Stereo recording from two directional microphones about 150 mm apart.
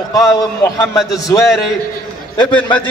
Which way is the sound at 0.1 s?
20° left (ahead or behind).